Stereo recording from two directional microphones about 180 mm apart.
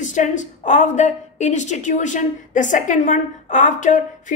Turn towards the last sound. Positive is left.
turn(degrees=45)  # may be behind; listen again after turning